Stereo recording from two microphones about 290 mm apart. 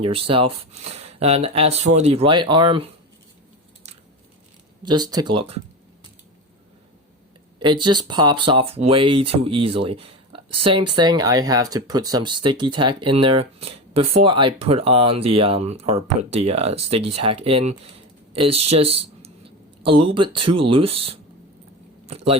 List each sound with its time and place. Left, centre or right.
0.0 s speech: centre
4.8 s speech: centre
7.6 s speech: centre
22.0 s a sound: centre